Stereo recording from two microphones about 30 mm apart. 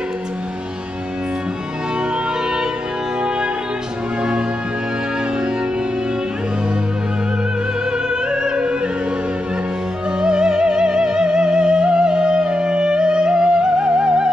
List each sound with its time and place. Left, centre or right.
8.1 s music: right
10.2 s music: right